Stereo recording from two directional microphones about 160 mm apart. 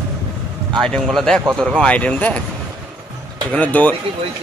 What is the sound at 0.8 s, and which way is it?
Speech, centre (ahead or behind).